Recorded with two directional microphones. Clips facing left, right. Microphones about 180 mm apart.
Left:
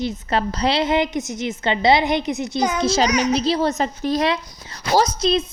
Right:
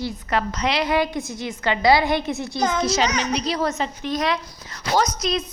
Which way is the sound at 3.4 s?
30° left (ahead or behind).